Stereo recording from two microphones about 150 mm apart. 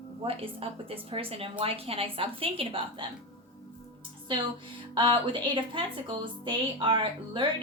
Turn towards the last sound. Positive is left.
turn(degrees=-35)  # may be behind; listen again after turning